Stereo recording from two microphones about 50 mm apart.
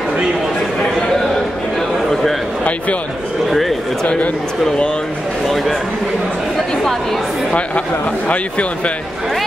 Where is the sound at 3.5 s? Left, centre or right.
Centre.